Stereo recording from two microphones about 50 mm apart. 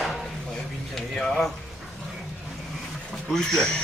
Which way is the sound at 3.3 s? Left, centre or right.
Centre.